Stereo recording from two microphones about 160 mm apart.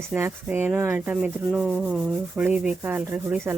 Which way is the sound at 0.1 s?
10° right (ahead or behind).